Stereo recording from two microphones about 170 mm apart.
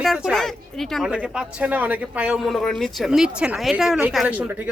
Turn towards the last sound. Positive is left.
turn(degrees=-5)  # may be behind; listen again after turning